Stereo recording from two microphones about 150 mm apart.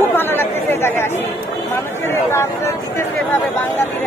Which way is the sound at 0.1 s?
15° left (ahead or behind).